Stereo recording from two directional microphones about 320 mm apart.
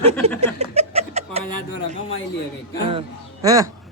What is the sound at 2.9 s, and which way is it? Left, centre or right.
Speech, centre.